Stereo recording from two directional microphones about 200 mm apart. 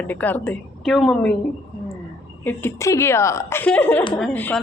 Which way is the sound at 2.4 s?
15° left (ahead or behind).